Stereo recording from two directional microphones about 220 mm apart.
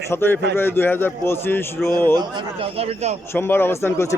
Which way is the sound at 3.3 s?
10° left (ahead or behind).